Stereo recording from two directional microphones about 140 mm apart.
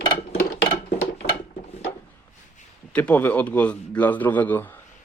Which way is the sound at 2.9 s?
10° left (ahead or behind).